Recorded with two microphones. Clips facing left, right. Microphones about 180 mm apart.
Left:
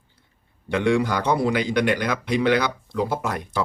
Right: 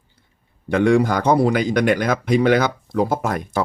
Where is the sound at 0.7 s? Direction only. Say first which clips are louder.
Right 5 dB; 45° right (ahead or behind).